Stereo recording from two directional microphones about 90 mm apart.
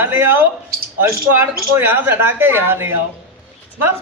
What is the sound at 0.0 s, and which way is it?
A woman's voice, 25° right (ahead or behind).